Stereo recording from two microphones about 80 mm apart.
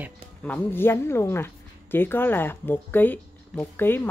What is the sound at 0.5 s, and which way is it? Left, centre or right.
A woman's voice, left.